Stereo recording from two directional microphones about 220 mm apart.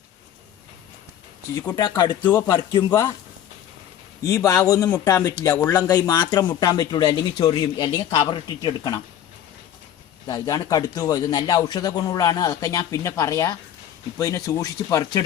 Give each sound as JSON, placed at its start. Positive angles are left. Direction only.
{"t": 1.5, "sound": "speech", "side_deg": 15}
{"t": 4.2, "sound": "speech", "side_deg": 15}
{"t": 10.2, "sound": "speech", "side_deg": 15}